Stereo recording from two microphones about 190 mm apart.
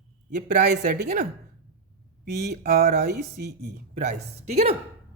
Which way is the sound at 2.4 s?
55° right (ahead or behind).